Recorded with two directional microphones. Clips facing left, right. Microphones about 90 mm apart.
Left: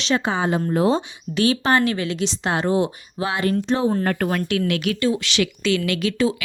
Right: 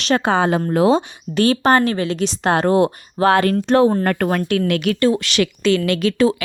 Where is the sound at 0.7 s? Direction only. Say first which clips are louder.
Right 4 dB; 90° right.